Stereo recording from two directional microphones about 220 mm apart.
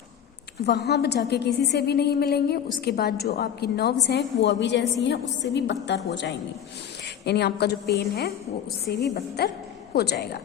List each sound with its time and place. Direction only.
0.6 s a woman's voice: 50° left (ahead or behind)